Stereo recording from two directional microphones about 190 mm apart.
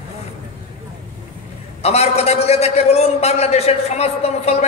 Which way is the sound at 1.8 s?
35° left (ahead or behind).